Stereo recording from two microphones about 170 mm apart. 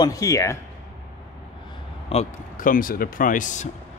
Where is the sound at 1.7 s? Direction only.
35° left (ahead or behind).